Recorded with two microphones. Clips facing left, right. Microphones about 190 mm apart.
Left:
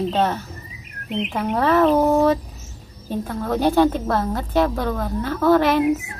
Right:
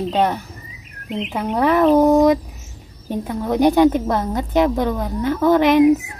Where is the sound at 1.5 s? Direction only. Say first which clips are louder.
Right 3 dB; 10° right (ahead or behind).